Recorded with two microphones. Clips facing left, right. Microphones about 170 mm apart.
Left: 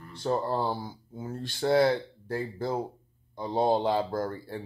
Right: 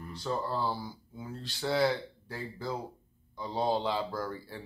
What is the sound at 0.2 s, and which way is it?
Speech, 50° left (ahead or behind).